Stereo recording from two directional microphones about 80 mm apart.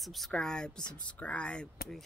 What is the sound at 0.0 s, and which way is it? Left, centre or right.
Speech, centre.